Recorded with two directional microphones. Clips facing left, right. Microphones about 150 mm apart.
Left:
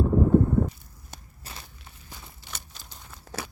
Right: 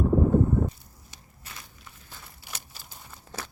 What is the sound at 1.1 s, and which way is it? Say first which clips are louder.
Walk: left 10 dB; 50° left (ahead or behind).